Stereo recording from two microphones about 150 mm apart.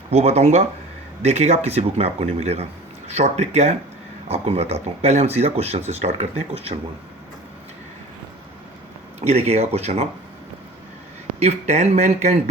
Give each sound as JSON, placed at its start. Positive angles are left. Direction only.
{"t": 0.1, "sound": "speech", "side_deg": -45}
{"t": 9.2, "sound": "speech", "side_deg": -45}
{"t": 11.3, "sound": "speech", "side_deg": -45}